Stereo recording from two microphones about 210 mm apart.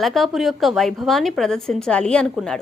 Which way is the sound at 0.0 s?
Centre (ahead or behind).